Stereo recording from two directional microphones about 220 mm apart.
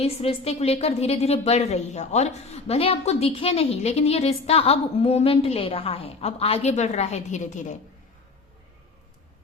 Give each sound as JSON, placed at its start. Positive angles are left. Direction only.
{"t": 0.0, "sound": "a woman's voice", "side_deg": 25}